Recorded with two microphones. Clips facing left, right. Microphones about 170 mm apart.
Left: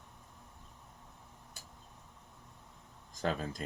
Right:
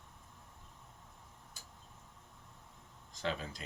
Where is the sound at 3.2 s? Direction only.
45° left (ahead or behind).